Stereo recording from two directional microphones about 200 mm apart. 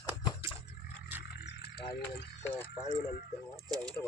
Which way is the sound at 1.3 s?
55° left (ahead or behind).